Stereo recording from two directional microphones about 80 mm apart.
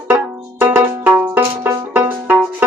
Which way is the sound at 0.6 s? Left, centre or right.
Right.